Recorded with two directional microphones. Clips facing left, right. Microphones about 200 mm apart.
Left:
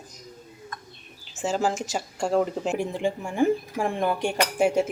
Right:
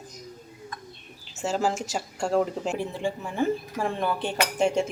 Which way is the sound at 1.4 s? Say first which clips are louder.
Left 1 dB; centre (ahead or behind).